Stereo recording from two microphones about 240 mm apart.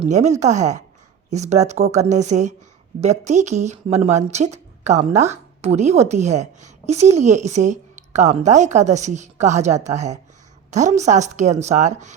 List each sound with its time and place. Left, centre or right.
0.0 s speech: right